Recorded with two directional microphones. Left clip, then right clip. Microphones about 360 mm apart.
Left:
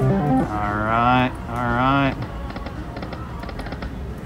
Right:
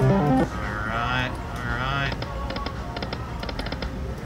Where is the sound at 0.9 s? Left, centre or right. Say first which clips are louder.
Left 9 dB; centre.